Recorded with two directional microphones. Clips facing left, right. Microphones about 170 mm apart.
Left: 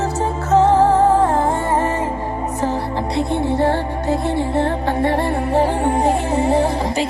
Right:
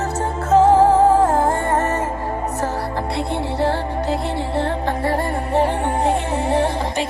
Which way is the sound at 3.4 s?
55° left (ahead or behind).